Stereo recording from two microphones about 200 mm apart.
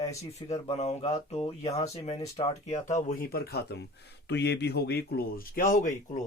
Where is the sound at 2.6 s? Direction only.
35° left (ahead or behind).